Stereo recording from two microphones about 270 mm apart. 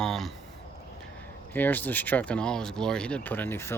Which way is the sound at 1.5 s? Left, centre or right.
Centre.